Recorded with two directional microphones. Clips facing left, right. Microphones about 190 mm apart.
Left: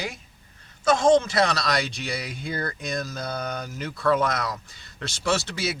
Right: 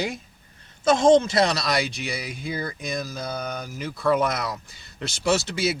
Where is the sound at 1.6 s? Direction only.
5° right (ahead or behind).